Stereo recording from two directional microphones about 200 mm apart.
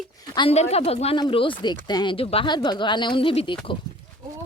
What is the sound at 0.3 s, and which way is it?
Speech, 30° left (ahead or behind).